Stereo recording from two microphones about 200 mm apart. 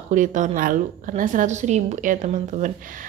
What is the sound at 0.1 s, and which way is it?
A woman's voice, 40° right (ahead or behind).